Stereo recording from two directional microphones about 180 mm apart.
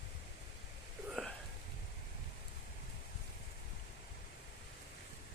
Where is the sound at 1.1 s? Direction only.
Centre (ahead or behind).